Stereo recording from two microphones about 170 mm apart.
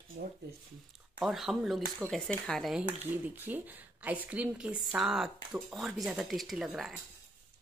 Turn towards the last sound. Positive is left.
turn(degrees=0)  # may be behind; listen again after turning